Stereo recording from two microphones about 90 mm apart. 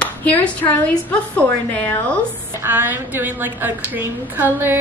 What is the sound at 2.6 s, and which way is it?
A woman's voice, 25° right (ahead or behind).